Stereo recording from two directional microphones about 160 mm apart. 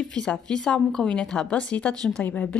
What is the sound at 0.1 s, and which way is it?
A woman's voice, 5° left (ahead or behind).